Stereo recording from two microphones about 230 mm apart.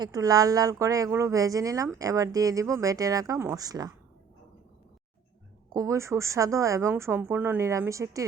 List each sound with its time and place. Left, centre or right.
0.0 s speech: centre
5.7 s speech: centre